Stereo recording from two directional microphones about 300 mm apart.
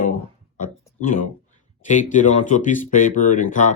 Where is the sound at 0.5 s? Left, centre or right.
Left.